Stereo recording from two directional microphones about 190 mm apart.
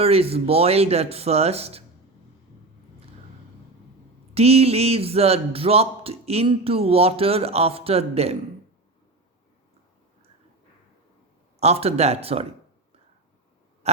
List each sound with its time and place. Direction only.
0.0 s speech: 30° right (ahead or behind)
4.4 s speech: 35° right (ahead or behind)
11.6 s speech: 35° right (ahead or behind)
13.8 s a sound: 35° right (ahead or behind)